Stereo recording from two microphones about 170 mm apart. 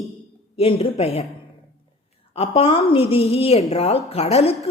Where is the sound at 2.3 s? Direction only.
35° left (ahead or behind).